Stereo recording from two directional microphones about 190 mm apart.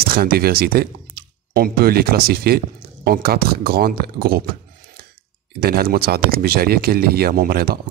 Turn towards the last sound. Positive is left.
turn(degrees=-55)  # may be behind; listen again after turning